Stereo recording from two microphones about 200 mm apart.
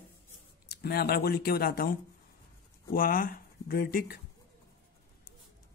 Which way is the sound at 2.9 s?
45° left (ahead or behind).